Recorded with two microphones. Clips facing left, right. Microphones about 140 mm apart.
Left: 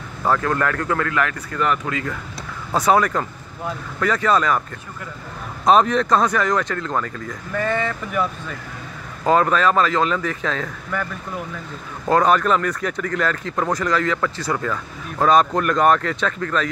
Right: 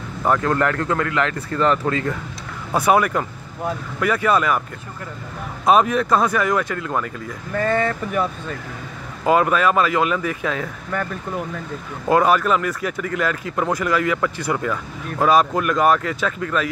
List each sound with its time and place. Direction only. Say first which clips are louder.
0.2 s speech: right 1 dB; 20° right (ahead or behind)
2.7 s speech: even; 10° right (ahead or behind)
5.7 s speech: even; 5° right (ahead or behind)
7.5 s speech: right 3 dB; 45° right (ahead or behind)
9.2 s speech: even; 10° right (ahead or behind)
12.1 s speech: even; 10° right (ahead or behind)